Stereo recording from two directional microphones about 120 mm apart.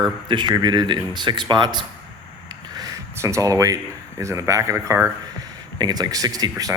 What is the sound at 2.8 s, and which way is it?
Speech, 30° right (ahead or behind).